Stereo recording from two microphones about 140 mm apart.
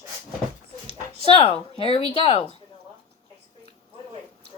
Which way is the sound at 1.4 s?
45° left (ahead or behind).